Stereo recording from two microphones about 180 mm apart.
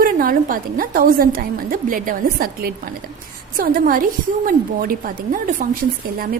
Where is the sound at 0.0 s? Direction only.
50° right (ahead or behind).